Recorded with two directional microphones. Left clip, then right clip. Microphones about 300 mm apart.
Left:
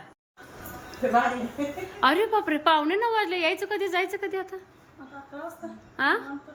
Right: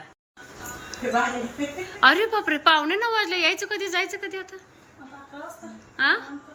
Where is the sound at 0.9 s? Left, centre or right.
Centre.